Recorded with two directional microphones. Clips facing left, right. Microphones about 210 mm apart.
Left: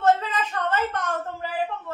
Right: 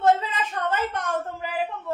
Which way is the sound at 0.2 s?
15° right (ahead or behind).